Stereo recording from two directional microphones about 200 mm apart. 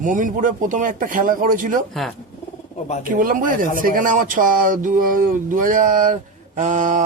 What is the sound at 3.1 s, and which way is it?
A man's voice, 45° right (ahead or behind).